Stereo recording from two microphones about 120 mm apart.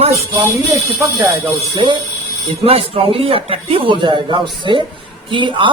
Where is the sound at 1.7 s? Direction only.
40° right (ahead or behind).